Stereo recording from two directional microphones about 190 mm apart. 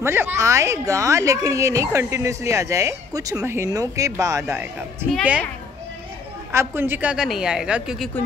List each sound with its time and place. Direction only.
0.0 s speech: 10° right (ahead or behind)
6.5 s a woman's voice: 15° right (ahead or behind)